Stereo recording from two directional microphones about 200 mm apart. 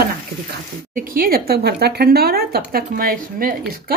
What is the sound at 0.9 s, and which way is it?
Speech, 45° right (ahead or behind).